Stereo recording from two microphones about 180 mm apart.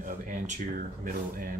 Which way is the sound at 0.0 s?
45° right (ahead or behind).